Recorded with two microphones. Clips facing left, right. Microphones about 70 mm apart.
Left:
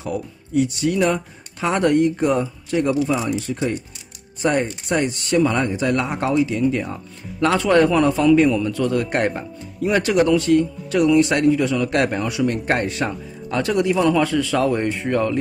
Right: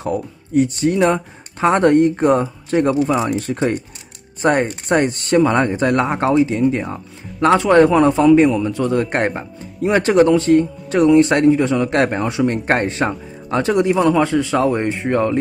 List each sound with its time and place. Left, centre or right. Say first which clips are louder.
0.0 s speech: right 4 dB; right